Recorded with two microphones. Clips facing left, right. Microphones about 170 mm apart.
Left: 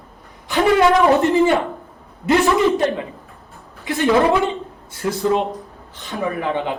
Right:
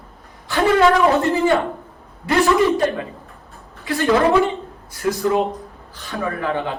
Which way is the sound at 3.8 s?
20° left (ahead or behind).